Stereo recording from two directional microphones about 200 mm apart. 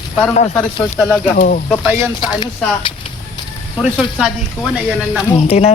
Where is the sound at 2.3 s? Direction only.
25° left (ahead or behind).